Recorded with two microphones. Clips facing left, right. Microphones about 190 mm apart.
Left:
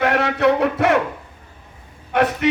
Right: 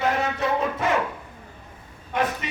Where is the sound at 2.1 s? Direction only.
70° left (ahead or behind).